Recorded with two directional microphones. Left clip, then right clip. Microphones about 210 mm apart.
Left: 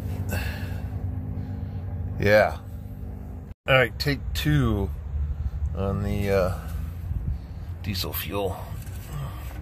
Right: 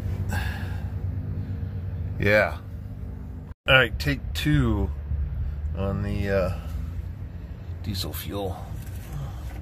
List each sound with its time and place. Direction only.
0.3 s a sound: 15° left (ahead or behind)
2.1 s speech: 10° left (ahead or behind)
3.6 s speech: 10° left (ahead or behind)
7.8 s speech: 15° left (ahead or behind)